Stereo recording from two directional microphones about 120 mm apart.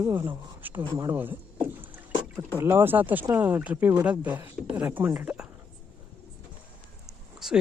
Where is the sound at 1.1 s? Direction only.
15° right (ahead or behind).